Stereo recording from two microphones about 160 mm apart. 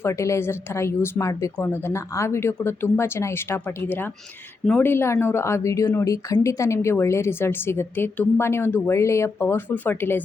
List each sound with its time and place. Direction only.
0.0 s a woman's voice: 20° left (ahead or behind)